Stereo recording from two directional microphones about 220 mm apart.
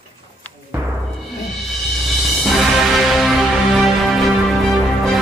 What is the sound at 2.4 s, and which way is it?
Music, centre (ahead or behind).